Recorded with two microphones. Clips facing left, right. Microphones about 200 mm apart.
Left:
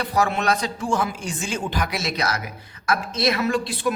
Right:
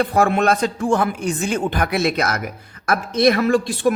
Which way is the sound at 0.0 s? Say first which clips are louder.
Right 5 dB; 50° right (ahead or behind).